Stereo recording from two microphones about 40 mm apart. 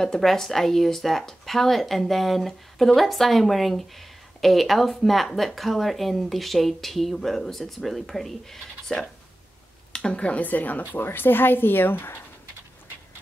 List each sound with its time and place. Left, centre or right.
0.0 s speech: centre
9.9 s speech: left
10.4 s speech: left
10.9 s speech: left